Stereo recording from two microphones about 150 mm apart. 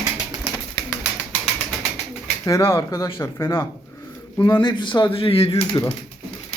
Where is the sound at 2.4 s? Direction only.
20° left (ahead or behind).